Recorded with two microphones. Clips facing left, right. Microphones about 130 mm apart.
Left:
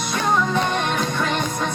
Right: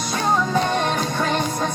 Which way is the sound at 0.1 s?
35° right (ahead or behind).